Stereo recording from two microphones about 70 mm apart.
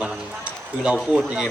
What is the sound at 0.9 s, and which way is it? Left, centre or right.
Speech, centre.